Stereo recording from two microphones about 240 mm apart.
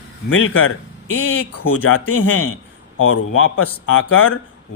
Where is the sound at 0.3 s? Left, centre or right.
Left.